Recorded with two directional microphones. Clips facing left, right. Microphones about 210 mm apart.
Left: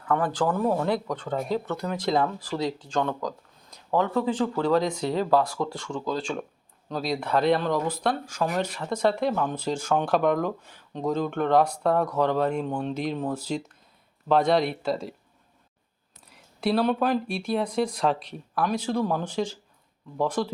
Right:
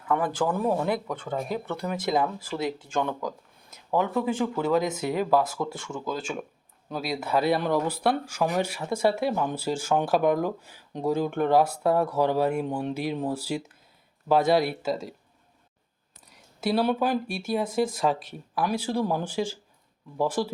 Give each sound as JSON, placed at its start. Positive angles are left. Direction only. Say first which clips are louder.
{"t": 0.0, "sound": "speech", "louder": "left 1 dB", "side_deg": -10}
{"t": 4.8, "sound": "speech", "louder": "left 1 dB", "side_deg": -20}
{"t": 5.1, "sound": "speech", "louder": "left 1 dB", "side_deg": -10}
{"t": 16.2, "sound": "speech", "louder": "left 2 dB", "side_deg": 0}